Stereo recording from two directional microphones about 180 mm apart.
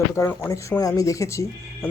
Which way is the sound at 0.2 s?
15° left (ahead or behind).